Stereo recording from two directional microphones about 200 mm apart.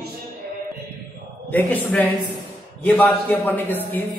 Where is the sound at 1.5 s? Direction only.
10° left (ahead or behind).